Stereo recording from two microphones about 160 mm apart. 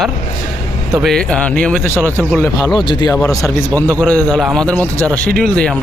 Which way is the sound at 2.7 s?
30° left (ahead or behind).